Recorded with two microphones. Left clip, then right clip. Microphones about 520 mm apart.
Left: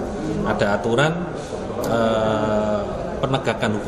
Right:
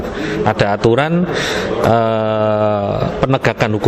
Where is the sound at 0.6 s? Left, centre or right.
Right.